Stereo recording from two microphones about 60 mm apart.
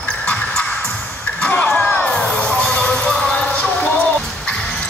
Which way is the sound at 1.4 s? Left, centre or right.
Left.